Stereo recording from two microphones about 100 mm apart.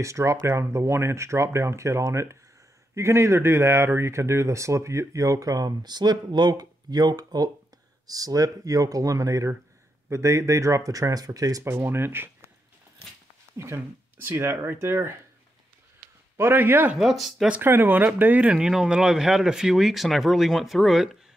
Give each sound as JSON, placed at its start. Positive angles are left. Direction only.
{"t": 0.0, "sound": "speech", "side_deg": -30}
{"t": 11.7, "sound": "speech", "side_deg": -20}
{"t": 13.6, "sound": "speech", "side_deg": -25}
{"t": 16.3, "sound": "speech", "side_deg": -25}
{"t": 16.9, "sound": "speech", "side_deg": 0}
{"t": 17.5, "sound": "speech", "side_deg": -20}